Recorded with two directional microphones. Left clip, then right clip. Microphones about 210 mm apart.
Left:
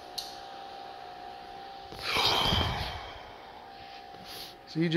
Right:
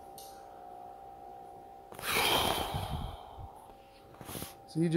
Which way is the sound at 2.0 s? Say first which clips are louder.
Left 2 dB; 40° right (ahead or behind).